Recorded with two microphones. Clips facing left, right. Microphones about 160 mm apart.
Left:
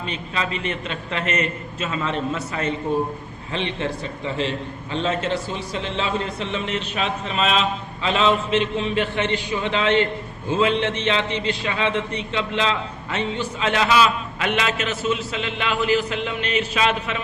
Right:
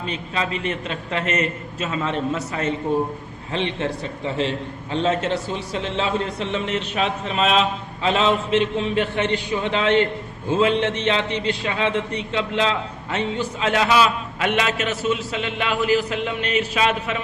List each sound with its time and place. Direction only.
0.3 s a man's voice: 45° right (ahead or behind)
4.9 s a man's voice: 50° right (ahead or behind)